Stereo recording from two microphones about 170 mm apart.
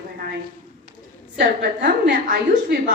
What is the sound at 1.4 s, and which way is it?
A woman's voice, 75° right (ahead or behind).